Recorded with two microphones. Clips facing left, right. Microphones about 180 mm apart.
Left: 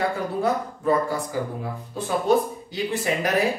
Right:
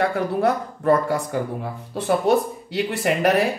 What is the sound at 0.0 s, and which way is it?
Speech, 65° right (ahead or behind).